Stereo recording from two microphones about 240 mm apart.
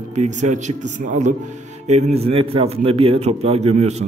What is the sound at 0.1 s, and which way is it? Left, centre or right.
A man's voice, right.